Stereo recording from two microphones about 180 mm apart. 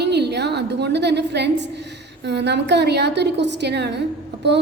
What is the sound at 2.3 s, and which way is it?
A woman's voice, 70° right (ahead or behind).